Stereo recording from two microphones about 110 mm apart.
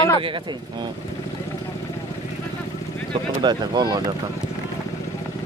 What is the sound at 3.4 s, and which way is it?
Speech, 40° right (ahead or behind).